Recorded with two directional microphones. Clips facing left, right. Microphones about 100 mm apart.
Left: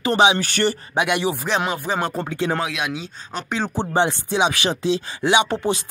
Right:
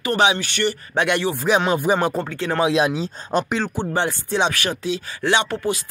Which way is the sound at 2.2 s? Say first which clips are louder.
Left 2 dB; 15° left (ahead or behind).